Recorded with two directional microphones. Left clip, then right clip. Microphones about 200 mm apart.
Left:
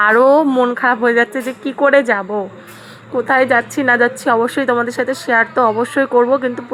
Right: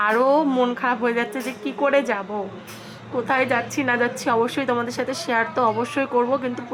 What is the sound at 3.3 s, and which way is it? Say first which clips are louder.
A woman's voice: left 8 dB; 30° left (ahead or behind).